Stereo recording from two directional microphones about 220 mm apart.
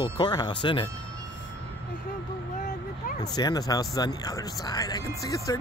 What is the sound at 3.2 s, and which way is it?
Speech, 20° left (ahead or behind).